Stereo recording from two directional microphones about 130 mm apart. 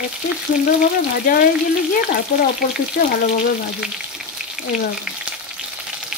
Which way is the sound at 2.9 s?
90° left.